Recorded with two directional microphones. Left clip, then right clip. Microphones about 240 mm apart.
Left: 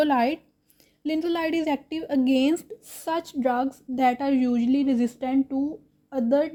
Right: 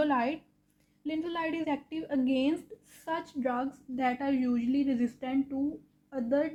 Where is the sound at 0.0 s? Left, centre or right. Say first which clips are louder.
Left 7 dB; left.